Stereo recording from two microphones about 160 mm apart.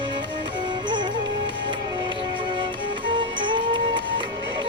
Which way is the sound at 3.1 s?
30° right (ahead or behind).